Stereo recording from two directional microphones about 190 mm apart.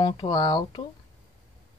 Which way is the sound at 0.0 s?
20° left (ahead or behind).